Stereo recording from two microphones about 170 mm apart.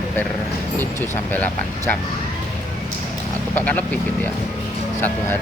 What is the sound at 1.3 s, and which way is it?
Speech, 10° left (ahead or behind).